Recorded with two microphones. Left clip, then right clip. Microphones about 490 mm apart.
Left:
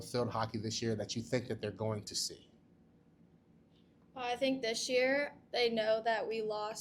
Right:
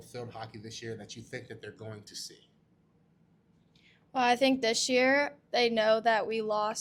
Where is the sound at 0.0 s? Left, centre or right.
Left.